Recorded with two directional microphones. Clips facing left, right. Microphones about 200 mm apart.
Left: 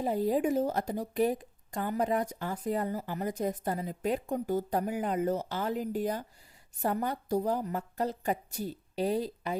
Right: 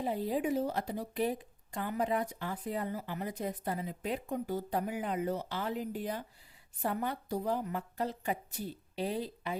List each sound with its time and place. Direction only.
0.0 s speech: 45° left (ahead or behind)